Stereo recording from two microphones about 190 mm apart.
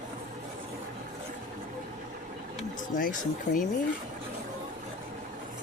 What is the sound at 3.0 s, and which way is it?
Speech, 45° left (ahead or behind).